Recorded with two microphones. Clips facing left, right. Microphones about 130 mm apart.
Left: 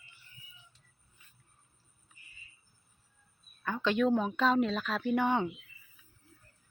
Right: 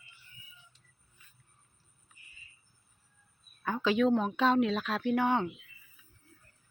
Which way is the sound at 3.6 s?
10° right (ahead or behind).